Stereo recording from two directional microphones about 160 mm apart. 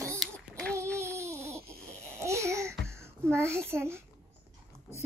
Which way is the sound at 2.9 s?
15° right (ahead or behind).